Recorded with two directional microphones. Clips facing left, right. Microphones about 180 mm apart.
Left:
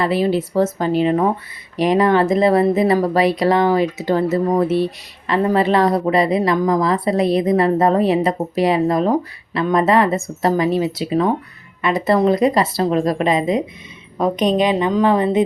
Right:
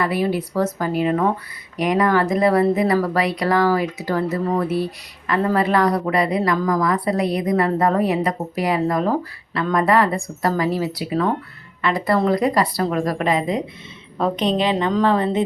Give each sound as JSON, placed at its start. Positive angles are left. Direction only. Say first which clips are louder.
{"t": 0.0, "sound": "a woman's voice", "louder": "left 3 dB", "side_deg": 25}